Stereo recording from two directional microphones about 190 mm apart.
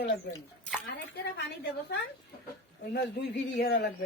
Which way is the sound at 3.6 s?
55° left (ahead or behind).